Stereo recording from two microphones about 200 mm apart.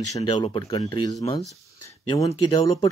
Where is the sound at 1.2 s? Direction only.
30° left (ahead or behind).